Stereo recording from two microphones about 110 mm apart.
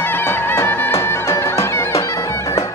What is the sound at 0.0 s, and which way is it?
Music, 20° left (ahead or behind).